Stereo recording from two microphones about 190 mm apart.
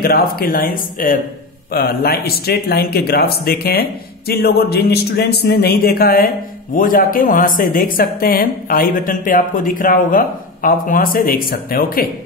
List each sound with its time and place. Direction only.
0.0 s speech: 50° left (ahead or behind)